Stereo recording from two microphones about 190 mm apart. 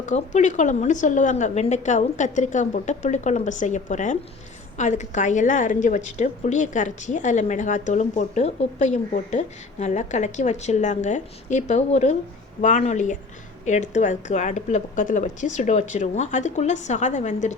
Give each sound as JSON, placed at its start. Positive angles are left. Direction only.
{"t": 0.0, "sound": "a woman's voice", "side_deg": 40}